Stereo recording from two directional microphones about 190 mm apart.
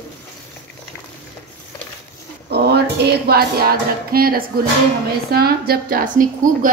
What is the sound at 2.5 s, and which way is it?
A woman's voice, 60° right (ahead or behind).